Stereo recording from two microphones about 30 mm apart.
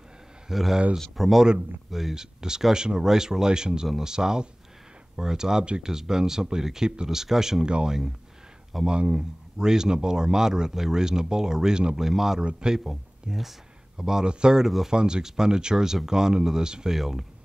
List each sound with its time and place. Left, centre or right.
0.5 s speech: centre
2.1 s speech: right
7.6 s speech: right; by 12.4 s centre
12.4 s speech: right
12.7 s speech: centre
14.2 s speech: right
16.9 s speech: centre